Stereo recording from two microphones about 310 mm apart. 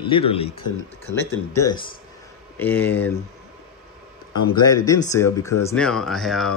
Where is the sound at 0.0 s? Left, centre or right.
Centre.